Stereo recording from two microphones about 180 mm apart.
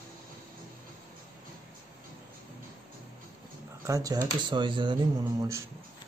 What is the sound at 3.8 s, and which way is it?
Speech, 20° right (ahead or behind).